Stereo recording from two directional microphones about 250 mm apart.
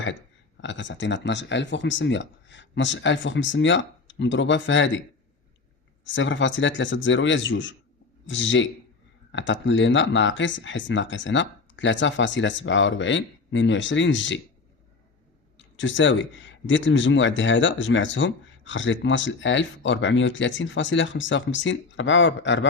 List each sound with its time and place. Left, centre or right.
0.0 s speech: left
6.1 s speech: left
15.5 s speech: left